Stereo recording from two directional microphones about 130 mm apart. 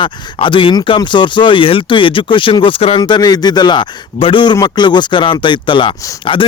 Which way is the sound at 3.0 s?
30° left (ahead or behind).